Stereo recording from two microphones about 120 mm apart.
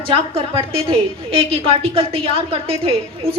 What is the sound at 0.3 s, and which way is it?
A woman's voice, 50° right (ahead or behind).